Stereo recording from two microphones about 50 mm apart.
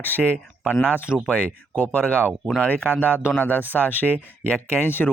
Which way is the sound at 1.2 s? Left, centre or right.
Centre.